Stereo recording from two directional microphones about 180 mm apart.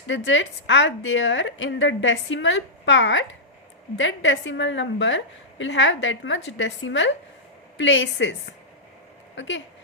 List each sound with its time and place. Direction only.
0.1 s a woman's voice: 90° left